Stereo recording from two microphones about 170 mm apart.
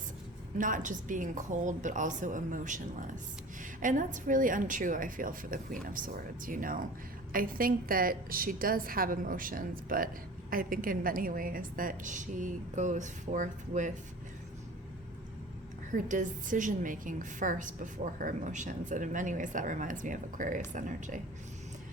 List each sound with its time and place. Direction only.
0.6 s a woman's voice: 50° right (ahead or behind)
15.9 s a woman's voice: 50° right (ahead or behind)